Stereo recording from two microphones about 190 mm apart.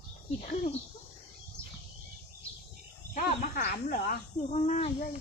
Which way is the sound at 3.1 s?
40° left (ahead or behind).